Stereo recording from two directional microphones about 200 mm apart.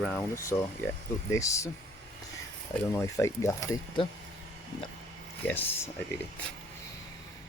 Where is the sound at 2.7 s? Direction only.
15° left (ahead or behind).